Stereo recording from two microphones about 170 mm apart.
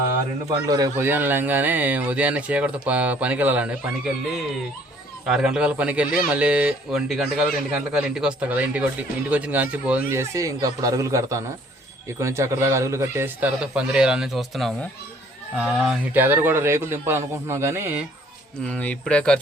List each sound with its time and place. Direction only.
0.7 s a man's voice: 15° right (ahead or behind)
18.7 s speech: 10° left (ahead or behind)